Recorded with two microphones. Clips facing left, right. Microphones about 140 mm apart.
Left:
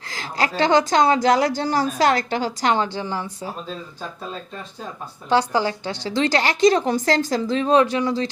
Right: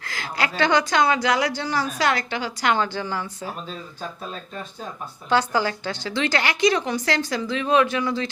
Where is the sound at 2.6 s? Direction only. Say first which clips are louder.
Right 1 dB; 30° left (ahead or behind).